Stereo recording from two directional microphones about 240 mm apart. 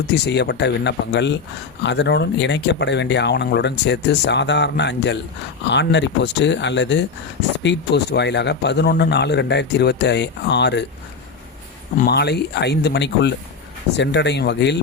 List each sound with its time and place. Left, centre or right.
0.1 s speech: left
11.9 s speech: left